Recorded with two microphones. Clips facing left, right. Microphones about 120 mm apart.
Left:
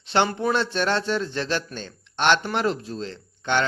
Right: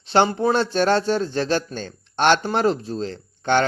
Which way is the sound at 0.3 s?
30° right (ahead or behind).